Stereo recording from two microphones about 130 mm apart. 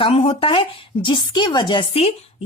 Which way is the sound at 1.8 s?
50° left (ahead or behind).